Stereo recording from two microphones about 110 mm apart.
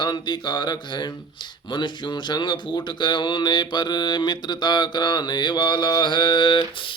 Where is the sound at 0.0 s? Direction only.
45° left (ahead or behind).